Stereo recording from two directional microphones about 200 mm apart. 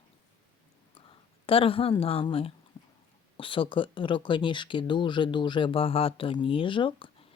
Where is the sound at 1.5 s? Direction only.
30° left (ahead or behind).